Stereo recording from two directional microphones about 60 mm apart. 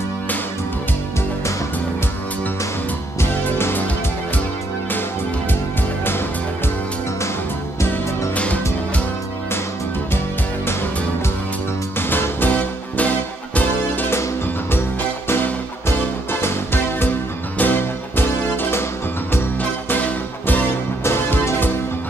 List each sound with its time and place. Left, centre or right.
3.2 s music: left
12.1 s music: left
14.7 s music: left
19.9 s music: left